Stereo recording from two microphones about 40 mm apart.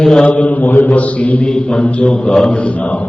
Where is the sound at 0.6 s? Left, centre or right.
Left.